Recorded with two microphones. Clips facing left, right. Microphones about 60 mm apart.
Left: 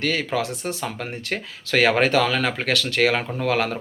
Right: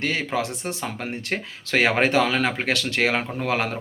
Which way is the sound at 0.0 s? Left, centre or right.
Right.